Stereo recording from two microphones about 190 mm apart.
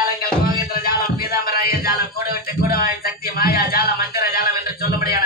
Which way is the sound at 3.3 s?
50° left (ahead or behind).